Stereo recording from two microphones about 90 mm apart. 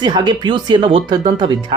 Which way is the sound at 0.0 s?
55° right (ahead or behind).